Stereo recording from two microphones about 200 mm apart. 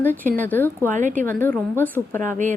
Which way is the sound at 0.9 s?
40° right (ahead or behind).